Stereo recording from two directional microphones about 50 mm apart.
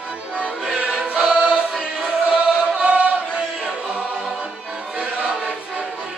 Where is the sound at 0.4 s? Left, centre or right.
Right.